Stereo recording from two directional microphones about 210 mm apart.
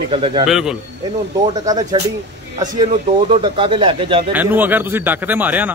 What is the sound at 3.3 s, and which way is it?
Speech, 25° right (ahead or behind).